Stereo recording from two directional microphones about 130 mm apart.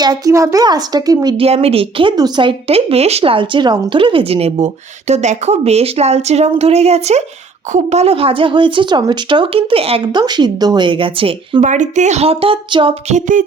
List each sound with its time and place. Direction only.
0.0 s speech: 30° right (ahead or behind)
1.4 s speech: 50° right (ahead or behind)
10.1 s speech: 35° right (ahead or behind)
11.6 s speech: 70° right (ahead or behind); by 13.0 s 40° right (ahead or behind)
13.1 s a sound: 75° right (ahead or behind)